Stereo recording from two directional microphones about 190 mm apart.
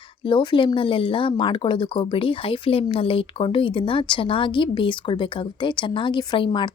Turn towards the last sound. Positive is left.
turn(degrees=25)  # may be behind; listen again after turning